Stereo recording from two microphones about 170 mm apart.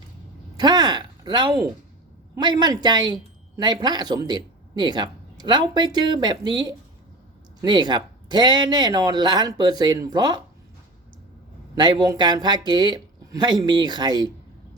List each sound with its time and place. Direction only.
0.5 s speech: 25° right (ahead or behind)
11.7 s speech: 25° right (ahead or behind)